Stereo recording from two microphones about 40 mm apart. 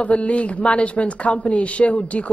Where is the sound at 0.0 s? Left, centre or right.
Left.